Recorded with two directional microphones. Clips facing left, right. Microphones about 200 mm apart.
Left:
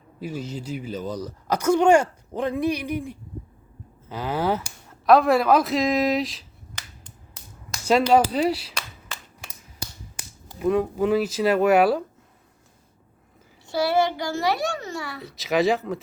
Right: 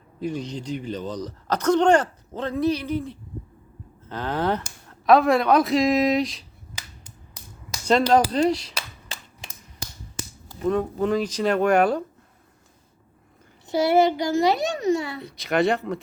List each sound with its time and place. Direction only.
0.2 s speech: 5° left (ahead or behind)
7.9 s speech: 5° left (ahead or behind)
10.6 s speech: 5° left (ahead or behind)
13.7 s a child's voice: 20° right (ahead or behind)
15.2 s speech: centre (ahead or behind)